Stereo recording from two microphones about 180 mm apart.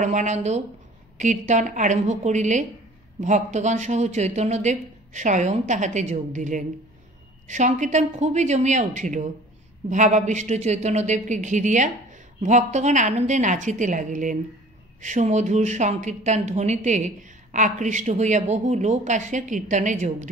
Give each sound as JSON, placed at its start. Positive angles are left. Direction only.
{"t": 0.0, "sound": "speech", "side_deg": -40}